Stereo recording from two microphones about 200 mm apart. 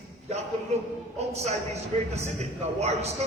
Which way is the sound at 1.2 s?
35° right (ahead or behind).